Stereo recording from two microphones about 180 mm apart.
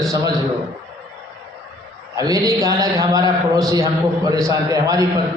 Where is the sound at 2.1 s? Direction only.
20° right (ahead or behind).